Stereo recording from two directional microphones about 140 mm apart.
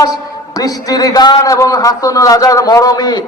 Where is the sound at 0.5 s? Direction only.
25° left (ahead or behind).